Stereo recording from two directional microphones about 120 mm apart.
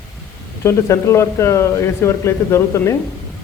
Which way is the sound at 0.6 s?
25° left (ahead or behind).